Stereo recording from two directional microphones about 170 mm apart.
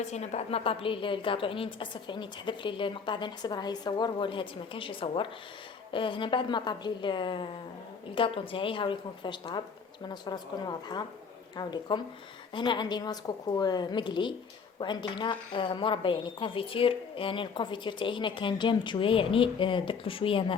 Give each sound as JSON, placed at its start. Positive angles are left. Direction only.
{"t": 0.0, "sound": "a woman's voice", "side_deg": 40}